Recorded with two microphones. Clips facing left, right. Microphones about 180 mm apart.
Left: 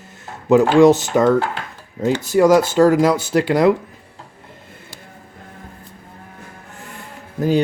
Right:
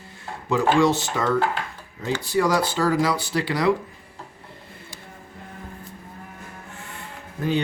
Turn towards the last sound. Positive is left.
turn(degrees=40)  # may be behind; listen again after turning